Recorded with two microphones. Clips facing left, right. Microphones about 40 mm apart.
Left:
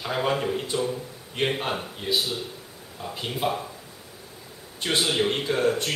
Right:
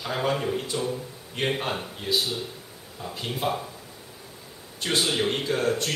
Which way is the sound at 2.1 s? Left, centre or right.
Centre.